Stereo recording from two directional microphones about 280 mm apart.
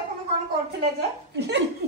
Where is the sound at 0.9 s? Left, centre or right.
Right.